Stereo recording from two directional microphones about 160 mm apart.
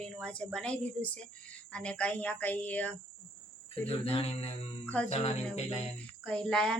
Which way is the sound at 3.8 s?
40° left (ahead or behind).